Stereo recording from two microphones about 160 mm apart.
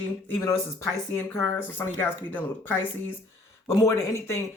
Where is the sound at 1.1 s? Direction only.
15° left (ahead or behind).